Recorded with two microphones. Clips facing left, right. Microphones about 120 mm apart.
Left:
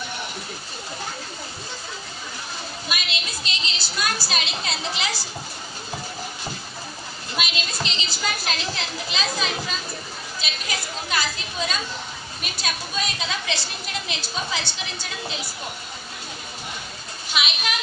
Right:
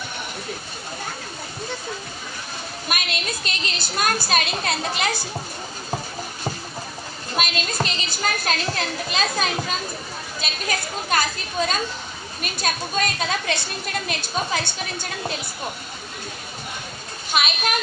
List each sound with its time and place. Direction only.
2.9 s a woman's voice: 50° right (ahead or behind)
7.3 s a sound: 45° right (ahead or behind)
10.4 s a woman's voice: 50° right (ahead or behind)
17.3 s a woman's voice: 50° right (ahead or behind)